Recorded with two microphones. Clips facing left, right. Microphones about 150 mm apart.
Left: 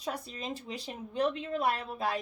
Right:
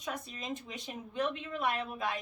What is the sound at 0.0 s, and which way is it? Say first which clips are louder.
A woman's voice: left 3 dB; 35° left (ahead or behind).